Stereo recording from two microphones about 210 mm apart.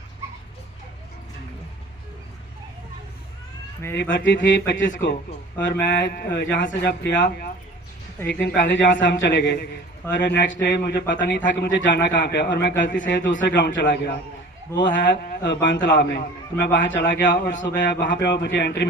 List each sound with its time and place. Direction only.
4.1 s a man's voice: 60° left (ahead or behind)
17.3 s a man's voice: 40° left (ahead or behind)
17.6 s speech: 55° left (ahead or behind)